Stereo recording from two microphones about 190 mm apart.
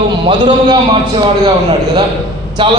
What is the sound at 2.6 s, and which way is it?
Speech, 25° right (ahead or behind).